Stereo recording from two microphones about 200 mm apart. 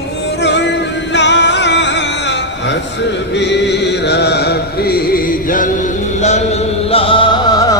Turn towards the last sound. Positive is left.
turn(degrees=20)  # may be behind; listen again after turning